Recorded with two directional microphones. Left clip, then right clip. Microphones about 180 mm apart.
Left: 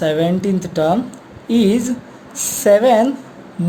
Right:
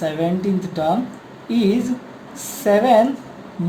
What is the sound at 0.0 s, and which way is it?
Speech, 55° left (ahead or behind).